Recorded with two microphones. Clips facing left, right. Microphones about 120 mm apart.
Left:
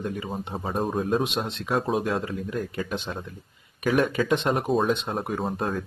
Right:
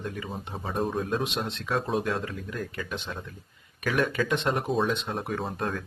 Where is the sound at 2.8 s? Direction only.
30° left (ahead or behind).